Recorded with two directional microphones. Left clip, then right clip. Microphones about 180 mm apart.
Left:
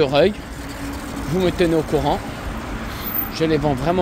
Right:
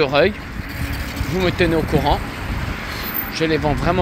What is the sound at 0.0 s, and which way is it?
Speech, 15° left (ahead or behind).